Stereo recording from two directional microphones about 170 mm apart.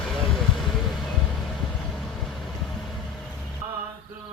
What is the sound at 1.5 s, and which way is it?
Vehicle, centre (ahead or behind).